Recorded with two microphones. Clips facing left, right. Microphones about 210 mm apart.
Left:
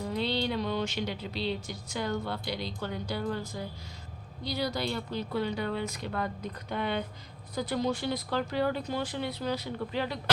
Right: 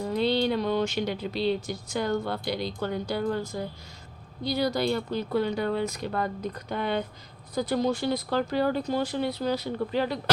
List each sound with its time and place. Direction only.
0.2 s speech: 45° right (ahead or behind)